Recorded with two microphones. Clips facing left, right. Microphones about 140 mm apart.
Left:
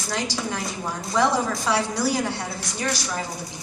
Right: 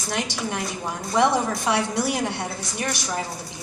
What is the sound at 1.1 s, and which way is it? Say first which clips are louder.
A woman's voice: right 1 dB; 20° right (ahead or behind).